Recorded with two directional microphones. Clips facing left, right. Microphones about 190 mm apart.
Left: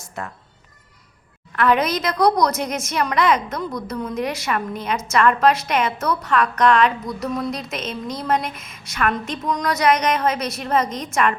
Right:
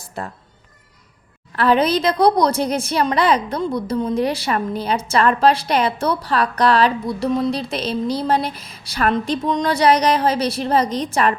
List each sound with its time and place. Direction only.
0.0 s music: 30° right (ahead or behind)
1.5 s a woman's voice: 30° right (ahead or behind)